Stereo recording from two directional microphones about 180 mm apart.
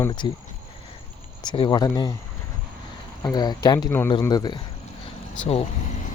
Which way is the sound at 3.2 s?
20° left (ahead or behind).